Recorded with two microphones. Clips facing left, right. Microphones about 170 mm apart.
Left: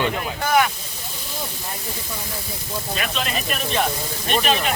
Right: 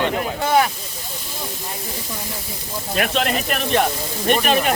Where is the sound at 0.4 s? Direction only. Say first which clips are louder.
Right 1 dB; 30° right (ahead or behind).